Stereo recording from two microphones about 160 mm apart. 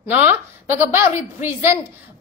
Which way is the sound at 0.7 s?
10° right (ahead or behind).